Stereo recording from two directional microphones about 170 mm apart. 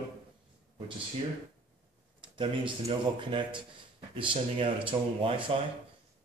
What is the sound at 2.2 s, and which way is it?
Speech, 30° right (ahead or behind).